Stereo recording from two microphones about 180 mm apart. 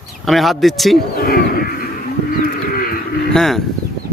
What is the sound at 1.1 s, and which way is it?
Wild animals, 55° left (ahead or behind).